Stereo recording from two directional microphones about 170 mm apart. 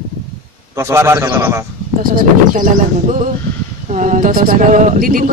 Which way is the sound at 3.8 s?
45° right (ahead or behind).